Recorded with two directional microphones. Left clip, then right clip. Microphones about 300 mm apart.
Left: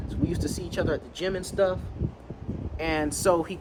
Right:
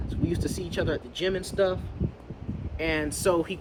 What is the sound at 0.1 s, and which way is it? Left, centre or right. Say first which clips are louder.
Speech: even; centre.